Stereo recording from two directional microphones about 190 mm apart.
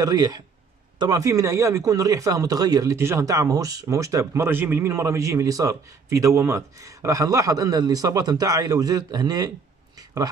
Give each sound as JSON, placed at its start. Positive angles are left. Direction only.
{"t": 0.0, "sound": "speech", "side_deg": -20}